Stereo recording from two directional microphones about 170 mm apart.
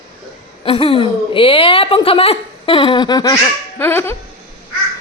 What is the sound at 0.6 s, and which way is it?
A woman's voice, 30° left (ahead or behind).